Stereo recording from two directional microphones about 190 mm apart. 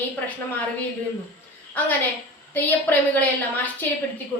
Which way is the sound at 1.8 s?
10° left (ahead or behind).